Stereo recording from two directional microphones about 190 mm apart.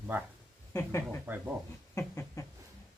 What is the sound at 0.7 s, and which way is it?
Speech, 15° left (ahead or behind).